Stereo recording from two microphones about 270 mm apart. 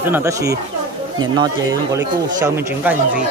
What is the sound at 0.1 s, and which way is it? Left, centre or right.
Speech, centre.